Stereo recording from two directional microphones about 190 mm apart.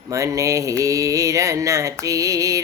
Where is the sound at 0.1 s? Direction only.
15° right (ahead or behind).